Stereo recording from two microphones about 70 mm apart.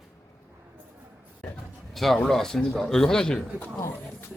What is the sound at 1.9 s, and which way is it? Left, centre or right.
A man's voice, centre.